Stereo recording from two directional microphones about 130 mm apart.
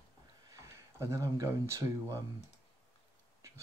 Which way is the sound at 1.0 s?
25° right (ahead or behind).